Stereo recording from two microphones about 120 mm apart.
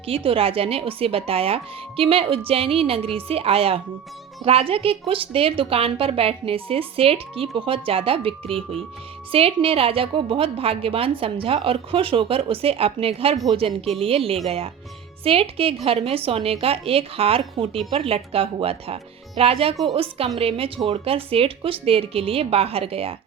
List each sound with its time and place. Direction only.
0.0 s a woman's voice: 50° right (ahead or behind)